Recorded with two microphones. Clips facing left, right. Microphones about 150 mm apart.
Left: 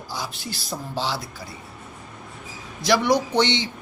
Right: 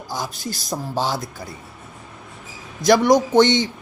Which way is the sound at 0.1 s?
45° right (ahead or behind).